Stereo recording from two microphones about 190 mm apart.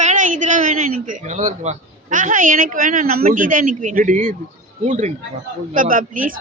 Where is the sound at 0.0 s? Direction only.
40° right (ahead or behind).